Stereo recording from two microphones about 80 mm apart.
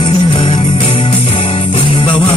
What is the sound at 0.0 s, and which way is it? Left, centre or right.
Music, left.